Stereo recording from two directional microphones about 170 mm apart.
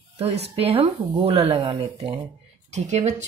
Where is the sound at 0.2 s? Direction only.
35° right (ahead or behind).